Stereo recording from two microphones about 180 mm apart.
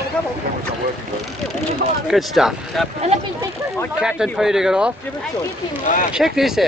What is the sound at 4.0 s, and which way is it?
Speech, 5° right (ahead or behind).